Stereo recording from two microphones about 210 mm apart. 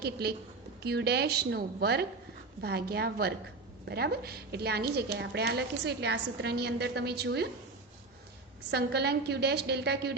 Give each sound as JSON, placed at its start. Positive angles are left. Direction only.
{"t": 0.0, "sound": "a woman's voice", "side_deg": -50}
{"t": 8.7, "sound": "a woman's voice", "side_deg": -50}